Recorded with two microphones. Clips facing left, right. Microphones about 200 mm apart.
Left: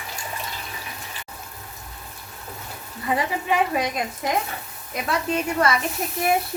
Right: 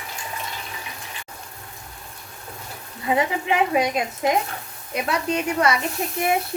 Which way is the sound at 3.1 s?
20° right (ahead or behind).